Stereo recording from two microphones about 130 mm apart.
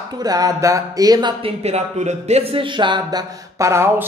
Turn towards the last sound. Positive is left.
turn(degrees=-20)  # may be behind; listen again after turning